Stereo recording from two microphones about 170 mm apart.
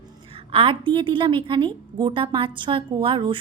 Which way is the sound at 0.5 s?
30° right (ahead or behind).